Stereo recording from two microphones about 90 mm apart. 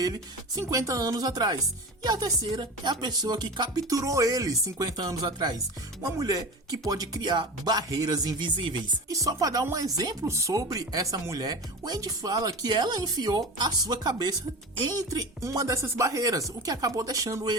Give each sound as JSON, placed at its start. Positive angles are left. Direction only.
{"t": 0.0, "sound": "speech", "side_deg": -45}
{"t": 9.0, "sound": "speech", "side_deg": -40}